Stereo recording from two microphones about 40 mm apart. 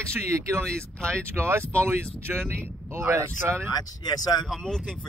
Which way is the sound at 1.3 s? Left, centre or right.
Right.